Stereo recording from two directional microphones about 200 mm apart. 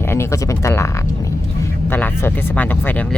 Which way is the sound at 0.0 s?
10° left (ahead or behind).